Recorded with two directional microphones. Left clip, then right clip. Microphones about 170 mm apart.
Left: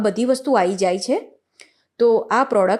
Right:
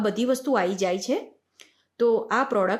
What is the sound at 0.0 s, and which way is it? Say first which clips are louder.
Speech: left 5 dB; 30° left (ahead or behind).